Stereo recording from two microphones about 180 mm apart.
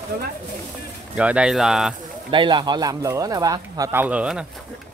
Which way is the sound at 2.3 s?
25° right (ahead or behind).